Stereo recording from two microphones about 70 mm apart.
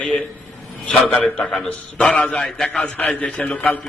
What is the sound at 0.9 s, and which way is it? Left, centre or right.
A man's voice, centre.